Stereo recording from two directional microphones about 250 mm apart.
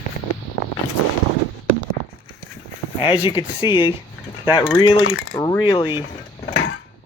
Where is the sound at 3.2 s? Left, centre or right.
Centre.